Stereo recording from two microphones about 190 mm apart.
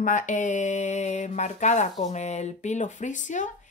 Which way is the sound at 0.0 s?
40° left (ahead or behind).